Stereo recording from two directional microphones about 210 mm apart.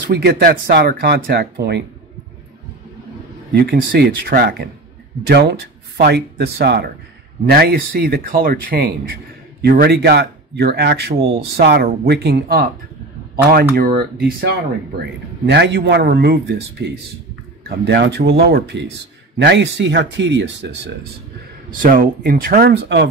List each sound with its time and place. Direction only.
0.1 s speech: 50° right (ahead or behind)
3.5 s speech: 45° right (ahead or behind)
13.7 s speech: 45° right (ahead or behind)
21.8 s speech: 40° right (ahead or behind)